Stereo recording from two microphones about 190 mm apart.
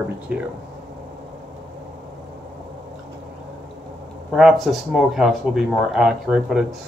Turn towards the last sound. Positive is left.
turn(degrees=-5)  # may be behind; listen again after turning